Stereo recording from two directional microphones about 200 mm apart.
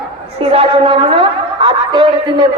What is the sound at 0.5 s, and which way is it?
A man's voice, 30° right (ahead or behind).